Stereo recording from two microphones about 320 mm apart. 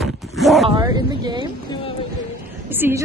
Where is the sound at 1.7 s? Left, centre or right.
Centre.